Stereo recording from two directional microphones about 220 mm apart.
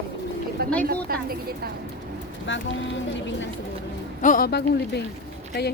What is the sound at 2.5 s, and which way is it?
Speech, 55° left (ahead or behind).